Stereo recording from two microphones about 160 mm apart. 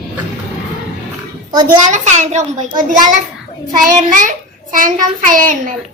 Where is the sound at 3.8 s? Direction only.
55° right (ahead or behind).